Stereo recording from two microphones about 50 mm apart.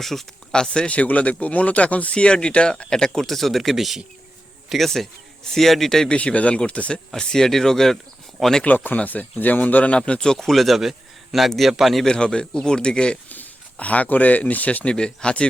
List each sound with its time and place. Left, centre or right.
0.0 s speech: centre
0.5 s speech: centre
0.9 s speech: left; by 6.1 s centre
6.1 s speech: left
7.2 s speech: centre
8.6 s a man's voice: left
10.3 s a man's voice: centre
12.0 s speech: centre
13.2 s speech: left
14.9 s speech: centre